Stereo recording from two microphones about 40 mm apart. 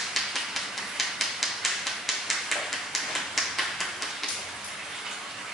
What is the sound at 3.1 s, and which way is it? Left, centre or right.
Tap, centre.